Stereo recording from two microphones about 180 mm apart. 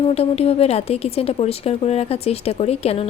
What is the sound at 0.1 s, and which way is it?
A woman's voice, 35° left (ahead or behind).